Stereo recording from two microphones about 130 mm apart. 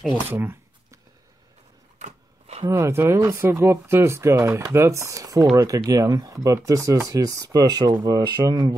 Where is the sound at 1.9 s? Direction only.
60° right (ahead or behind).